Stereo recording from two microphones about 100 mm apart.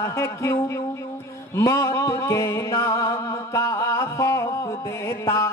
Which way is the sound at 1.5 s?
30° left (ahead or behind).